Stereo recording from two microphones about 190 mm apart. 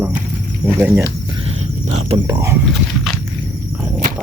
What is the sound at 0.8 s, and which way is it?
Cricket, 10° right (ahead or behind).